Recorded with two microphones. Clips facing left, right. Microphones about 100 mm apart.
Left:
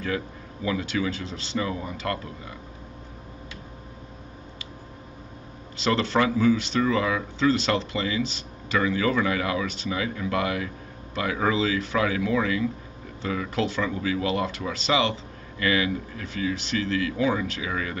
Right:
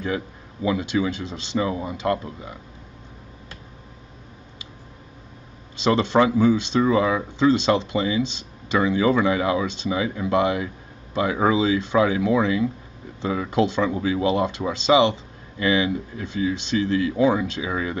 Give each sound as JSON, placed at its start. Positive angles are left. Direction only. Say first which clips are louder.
{"t": 0.0, "sound": "speech", "louder": "right 2 dB", "side_deg": -20}
{"t": 5.8, "sound": "speech", "louder": "right 5 dB", "side_deg": -20}